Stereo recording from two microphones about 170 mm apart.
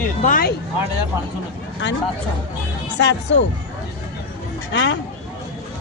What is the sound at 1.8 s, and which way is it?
Speech, 90° left.